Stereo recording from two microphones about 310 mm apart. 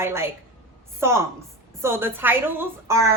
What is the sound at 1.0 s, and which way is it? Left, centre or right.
A woman's voice, centre.